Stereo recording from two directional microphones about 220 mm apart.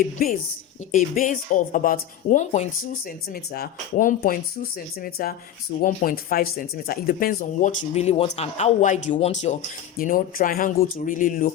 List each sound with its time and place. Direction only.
0.2 s speech: 40° left (ahead or behind)